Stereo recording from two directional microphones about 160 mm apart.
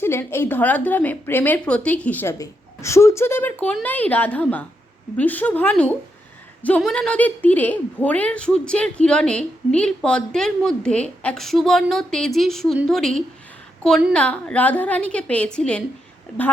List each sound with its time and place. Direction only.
0.0 s a woman's voice: 15° left (ahead or behind)